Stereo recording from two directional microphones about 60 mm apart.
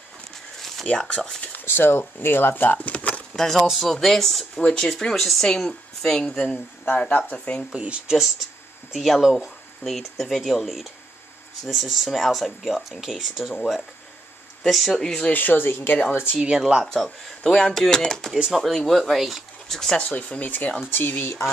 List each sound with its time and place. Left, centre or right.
0.6 s a sound: centre
0.8 s speech: centre
1.8 s speech: left
3.3 s speech: centre
7.1 s speech: left
7.3 s speech: centre
7.7 s speech: centre
8.9 s speech: centre
15.3 s speech: left
15.9 s speech: left
16.3 s speech: centre
16.8 s speech: centre
18.3 s speech: centre
20.0 s speech: left